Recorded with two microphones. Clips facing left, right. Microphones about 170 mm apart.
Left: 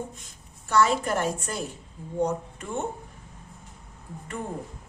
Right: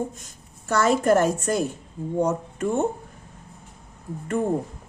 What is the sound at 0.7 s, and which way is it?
A woman's voice, 45° right (ahead or behind).